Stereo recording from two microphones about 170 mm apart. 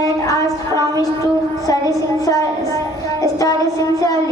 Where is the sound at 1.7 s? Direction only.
20° left (ahead or behind).